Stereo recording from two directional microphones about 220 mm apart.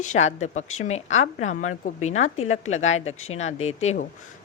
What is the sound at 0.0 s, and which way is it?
A woman's voice, 30° left (ahead or behind).